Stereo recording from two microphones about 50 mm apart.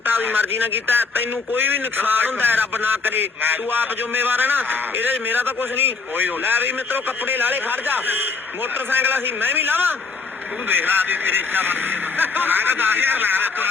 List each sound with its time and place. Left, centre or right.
0.0 s speech: right